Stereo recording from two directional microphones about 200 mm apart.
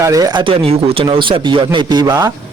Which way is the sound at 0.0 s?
15° right (ahead or behind).